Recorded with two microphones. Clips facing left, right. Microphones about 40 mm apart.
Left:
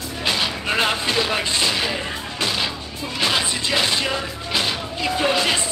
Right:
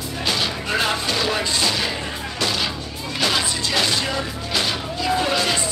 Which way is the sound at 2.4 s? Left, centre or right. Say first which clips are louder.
Even; centre.